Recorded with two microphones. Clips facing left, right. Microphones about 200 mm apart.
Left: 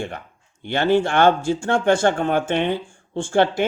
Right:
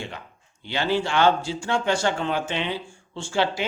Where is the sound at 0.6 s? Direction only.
55° left (ahead or behind).